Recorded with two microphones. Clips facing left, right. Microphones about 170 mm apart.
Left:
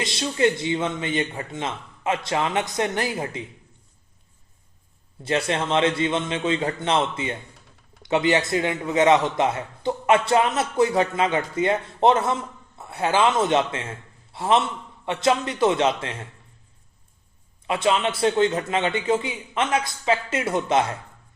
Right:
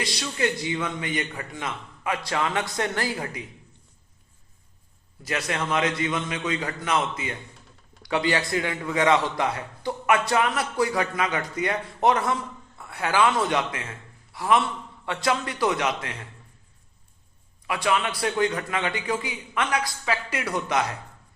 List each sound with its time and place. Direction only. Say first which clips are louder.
0.0 s a man's voice: left 5 dB; 25° left (ahead or behind)
5.2 s a man's voice: left 5 dB; 30° left (ahead or behind)
17.7 s a man's voice: left 3 dB; 25° left (ahead or behind)